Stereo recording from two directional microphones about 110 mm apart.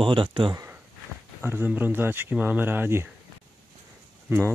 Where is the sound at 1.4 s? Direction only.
15° right (ahead or behind).